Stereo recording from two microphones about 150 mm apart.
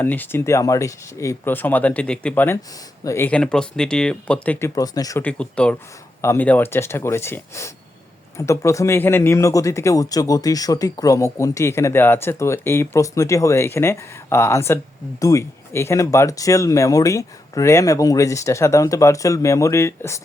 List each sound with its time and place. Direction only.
0.0 s speech: 15° left (ahead or behind)
3.2 s speech: 5° left (ahead or behind)
4.7 s speech: 25° left (ahead or behind)
5.2 s speech: 5° left (ahead or behind)